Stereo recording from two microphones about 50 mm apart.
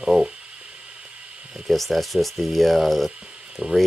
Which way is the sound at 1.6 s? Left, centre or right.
Centre.